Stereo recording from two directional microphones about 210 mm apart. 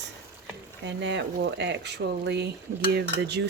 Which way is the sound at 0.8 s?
55° right (ahead or behind).